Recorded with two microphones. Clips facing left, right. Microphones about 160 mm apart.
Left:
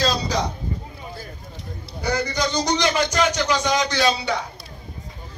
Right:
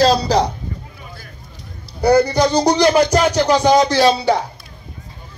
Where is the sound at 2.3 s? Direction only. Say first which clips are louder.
Right 8 dB; 60° right (ahead or behind).